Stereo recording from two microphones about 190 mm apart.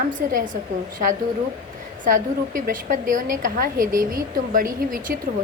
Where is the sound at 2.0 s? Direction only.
45° right (ahead or behind).